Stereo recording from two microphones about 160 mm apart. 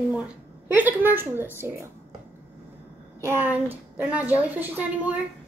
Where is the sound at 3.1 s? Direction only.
15° right (ahead or behind).